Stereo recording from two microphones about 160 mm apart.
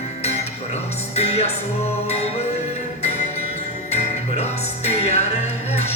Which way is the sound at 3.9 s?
40° left (ahead or behind).